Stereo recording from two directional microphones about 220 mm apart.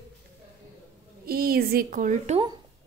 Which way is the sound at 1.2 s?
45° right (ahead or behind).